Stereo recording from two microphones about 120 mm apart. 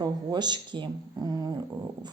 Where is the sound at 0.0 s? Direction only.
35° right (ahead or behind).